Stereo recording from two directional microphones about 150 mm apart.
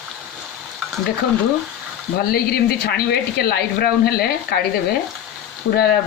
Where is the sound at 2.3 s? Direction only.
90° left.